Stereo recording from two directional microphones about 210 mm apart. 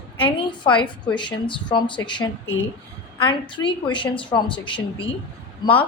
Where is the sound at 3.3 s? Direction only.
25° left (ahead or behind).